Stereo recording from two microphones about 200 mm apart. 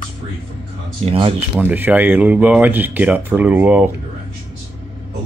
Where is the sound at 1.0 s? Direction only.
30° right (ahead or behind).